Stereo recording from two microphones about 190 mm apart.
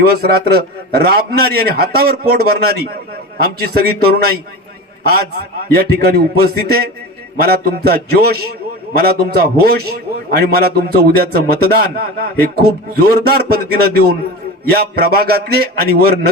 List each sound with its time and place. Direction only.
0.0 s a man's voice: 55° right (ahead or behind)